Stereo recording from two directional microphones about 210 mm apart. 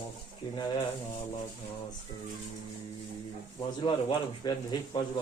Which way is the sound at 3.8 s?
20° left (ahead or behind).